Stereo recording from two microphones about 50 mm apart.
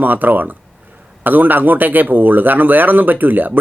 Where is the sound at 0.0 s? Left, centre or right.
Right.